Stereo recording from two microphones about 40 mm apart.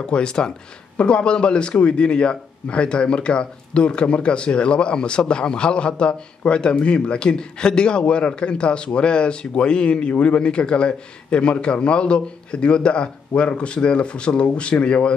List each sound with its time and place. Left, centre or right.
0.0 s a man's voice: left